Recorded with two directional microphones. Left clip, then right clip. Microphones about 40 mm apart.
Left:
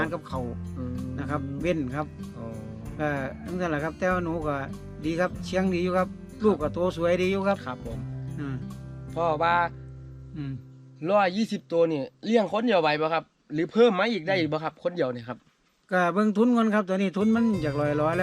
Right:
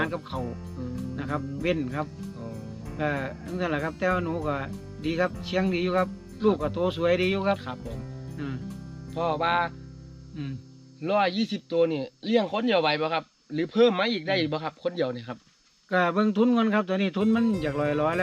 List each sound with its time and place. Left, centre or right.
0.0 s speech: left
0.4 s speech: centre
0.8 s music: left
1.6 s speech: left
2.5 s music: centre
3.0 s speech: left
3.3 s speech: centre
4.0 s speech: left
7.8 s speech: centre
8.4 s speech: left
10.3 s hum: left
11.0 s speech: left; by 18.1 s centre